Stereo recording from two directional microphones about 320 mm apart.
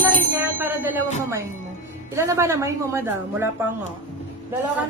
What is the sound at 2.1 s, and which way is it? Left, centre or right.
A woman's voice, centre.